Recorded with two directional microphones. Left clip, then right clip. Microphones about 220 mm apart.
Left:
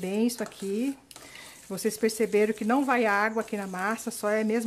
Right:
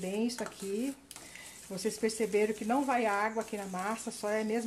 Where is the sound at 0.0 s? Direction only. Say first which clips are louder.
Left 6 dB; 30° left (ahead or behind).